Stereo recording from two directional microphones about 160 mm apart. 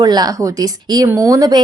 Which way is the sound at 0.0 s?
25° right (ahead or behind).